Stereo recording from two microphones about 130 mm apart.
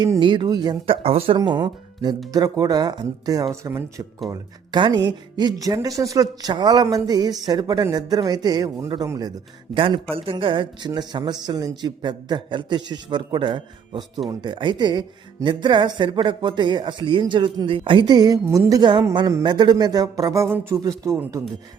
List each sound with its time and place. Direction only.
0.0 s speech: 35° right (ahead or behind)
0.9 s speech: 45° right (ahead or behind)
1.4 s speech: 30° right (ahead or behind)
4.3 s speech: 35° right (ahead or behind)
9.7 s speech: 45° right (ahead or behind)
18.4 s speech: 20° right (ahead or behind)